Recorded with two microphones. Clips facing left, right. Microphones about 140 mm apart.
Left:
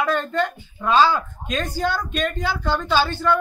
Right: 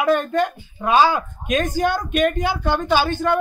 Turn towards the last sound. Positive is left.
turn(degrees=-15)  # may be behind; listen again after turning